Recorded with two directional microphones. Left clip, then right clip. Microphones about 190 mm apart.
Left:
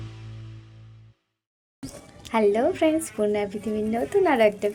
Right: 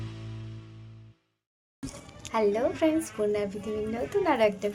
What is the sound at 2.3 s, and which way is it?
A woman's voice, 20° left (ahead or behind).